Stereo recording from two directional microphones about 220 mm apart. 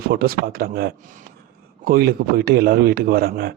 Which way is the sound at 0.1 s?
45° right (ahead or behind).